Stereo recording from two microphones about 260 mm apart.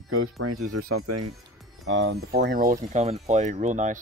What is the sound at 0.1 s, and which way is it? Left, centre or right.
Speech, right.